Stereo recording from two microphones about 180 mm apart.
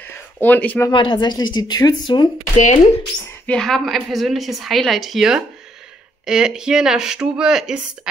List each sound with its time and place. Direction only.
0.0 s a sound: 10° left (ahead or behind)
0.9 s speech: 25° left (ahead or behind)
2.5 s speech: 40° left (ahead or behind)
3.4 s speech: 5° left (ahead or behind)